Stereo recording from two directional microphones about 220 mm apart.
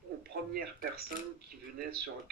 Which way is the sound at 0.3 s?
40° right (ahead or behind).